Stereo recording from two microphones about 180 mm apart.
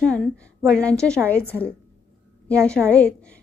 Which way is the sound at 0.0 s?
5° left (ahead or behind).